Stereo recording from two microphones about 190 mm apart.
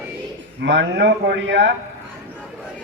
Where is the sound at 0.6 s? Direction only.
70° right (ahead or behind).